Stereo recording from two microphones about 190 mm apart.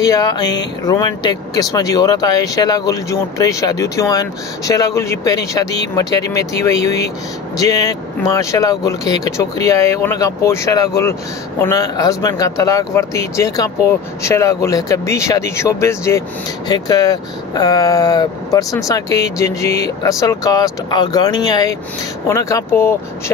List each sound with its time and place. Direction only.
0.0 s speech: 20° left (ahead or behind)